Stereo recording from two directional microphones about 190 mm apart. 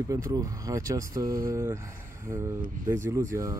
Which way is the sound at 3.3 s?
20° right (ahead or behind).